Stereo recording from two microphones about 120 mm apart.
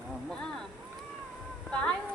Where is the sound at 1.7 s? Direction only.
10° left (ahead or behind).